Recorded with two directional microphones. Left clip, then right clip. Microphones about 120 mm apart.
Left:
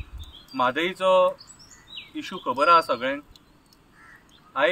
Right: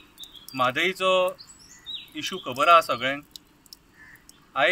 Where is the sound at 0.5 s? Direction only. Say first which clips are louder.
Even; 30° left (ahead or behind).